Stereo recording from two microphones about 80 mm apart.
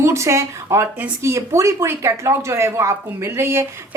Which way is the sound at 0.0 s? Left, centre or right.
Right.